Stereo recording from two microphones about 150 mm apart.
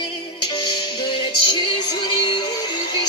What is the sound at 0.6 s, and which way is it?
Music, 30° left (ahead or behind).